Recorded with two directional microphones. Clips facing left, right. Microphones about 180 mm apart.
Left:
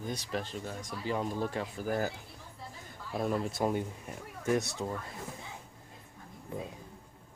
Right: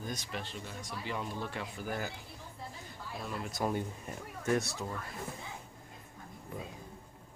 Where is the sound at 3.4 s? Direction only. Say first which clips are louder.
Left 3 dB; 25° left (ahead or behind).